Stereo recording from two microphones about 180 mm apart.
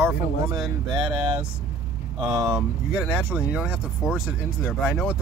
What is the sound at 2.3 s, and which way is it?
Speech, 20° right (ahead or behind).